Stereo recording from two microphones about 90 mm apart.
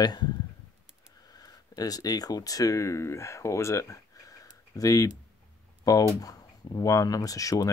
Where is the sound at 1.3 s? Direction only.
45° left (ahead or behind).